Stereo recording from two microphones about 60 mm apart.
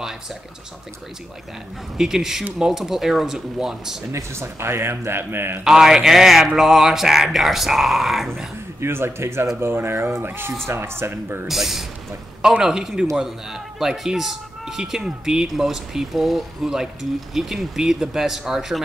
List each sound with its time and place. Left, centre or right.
2.0 s speech: centre
4.1 s a man's voice: right
5.6 s speech: centre
8.8 s a man's voice: right
11.4 s speech: centre